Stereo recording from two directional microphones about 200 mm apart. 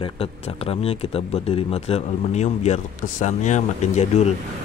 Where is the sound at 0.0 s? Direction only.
30° left (ahead or behind).